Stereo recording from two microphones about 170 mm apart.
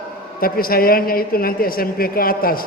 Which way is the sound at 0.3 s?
60° left (ahead or behind).